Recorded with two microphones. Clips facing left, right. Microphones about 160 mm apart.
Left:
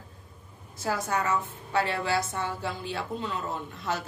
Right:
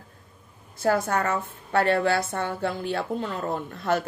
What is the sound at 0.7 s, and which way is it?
Speech, 55° right (ahead or behind).